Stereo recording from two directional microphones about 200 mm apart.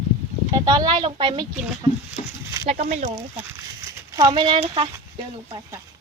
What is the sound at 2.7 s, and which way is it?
Speech, 35° right (ahead or behind).